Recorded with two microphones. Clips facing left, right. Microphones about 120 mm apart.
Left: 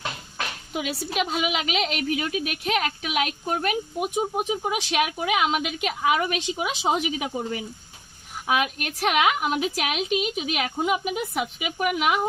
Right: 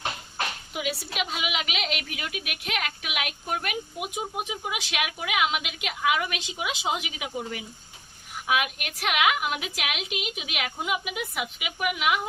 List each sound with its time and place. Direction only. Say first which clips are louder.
0.7 s a woman's voice: left 3 dB; 40° left (ahead or behind)